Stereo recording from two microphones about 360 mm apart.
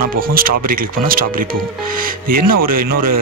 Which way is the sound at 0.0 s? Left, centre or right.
Right.